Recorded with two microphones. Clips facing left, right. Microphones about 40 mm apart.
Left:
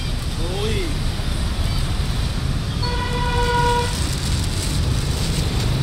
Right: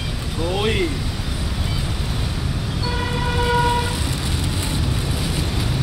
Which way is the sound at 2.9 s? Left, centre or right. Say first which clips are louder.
Even; centre.